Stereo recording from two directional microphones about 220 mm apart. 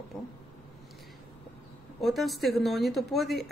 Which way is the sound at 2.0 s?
Centre (ahead or behind).